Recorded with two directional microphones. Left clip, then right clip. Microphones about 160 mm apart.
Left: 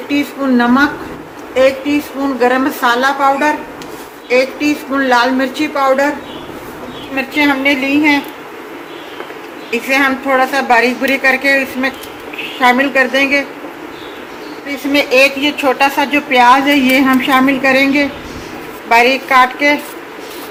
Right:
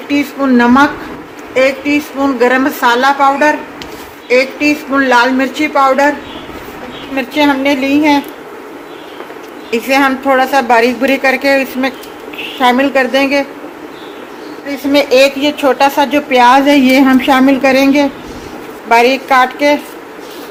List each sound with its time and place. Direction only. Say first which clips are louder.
0.1 s speech: right 3 dB; 45° right (ahead or behind)
7.2 s a woman's voice: right 2 dB; 55° right (ahead or behind)
9.7 s a woman's voice: right 2 dB; 55° right (ahead or behind)
14.9 s a woman's voice: right 2 dB; 55° right (ahead or behind)